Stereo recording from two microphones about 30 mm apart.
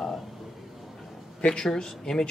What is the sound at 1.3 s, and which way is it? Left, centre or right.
Speech, left.